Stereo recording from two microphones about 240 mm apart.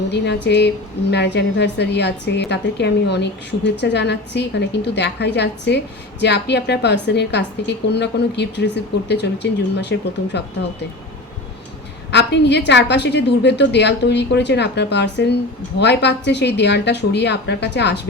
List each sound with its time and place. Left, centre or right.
0.4 s a woman's voice: left
12.1 s a woman's voice: left